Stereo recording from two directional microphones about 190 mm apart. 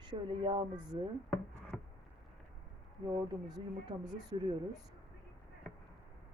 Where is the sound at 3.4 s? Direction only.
20° right (ahead or behind).